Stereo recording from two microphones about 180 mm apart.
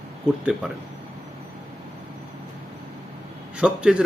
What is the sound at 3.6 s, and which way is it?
Speech, 5° right (ahead or behind).